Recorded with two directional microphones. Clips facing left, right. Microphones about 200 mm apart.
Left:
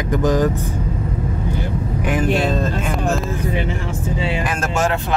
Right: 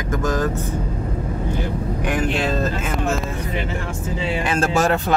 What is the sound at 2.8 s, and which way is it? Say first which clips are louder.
Speech: left 2 dB; centre (ahead or behind).